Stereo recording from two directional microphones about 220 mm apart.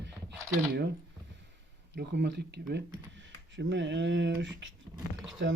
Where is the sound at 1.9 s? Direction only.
55° right (ahead or behind).